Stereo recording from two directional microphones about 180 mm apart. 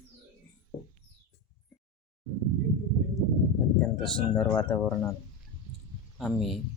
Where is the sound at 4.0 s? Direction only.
10° left (ahead or behind).